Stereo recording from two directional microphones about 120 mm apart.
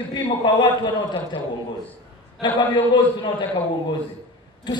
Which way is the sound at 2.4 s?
40° left (ahead or behind).